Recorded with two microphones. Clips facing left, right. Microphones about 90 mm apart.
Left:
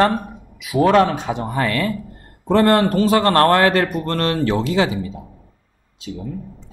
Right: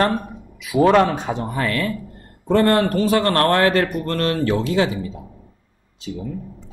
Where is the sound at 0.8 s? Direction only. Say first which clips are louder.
Even; 20° right (ahead or behind).